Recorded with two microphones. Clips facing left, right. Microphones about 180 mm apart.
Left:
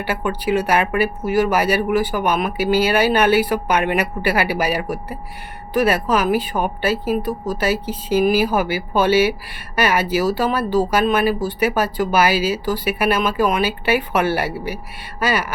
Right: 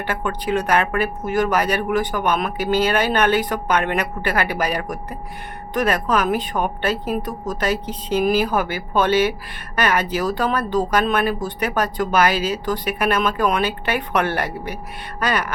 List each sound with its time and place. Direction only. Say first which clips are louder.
0.0 s speech: left 2 dB; 10° left (ahead or behind)